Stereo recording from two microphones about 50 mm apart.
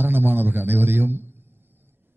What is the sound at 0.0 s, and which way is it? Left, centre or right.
A man's voice, right.